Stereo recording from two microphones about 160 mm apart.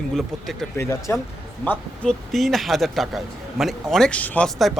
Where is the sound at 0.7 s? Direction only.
15° left (ahead or behind).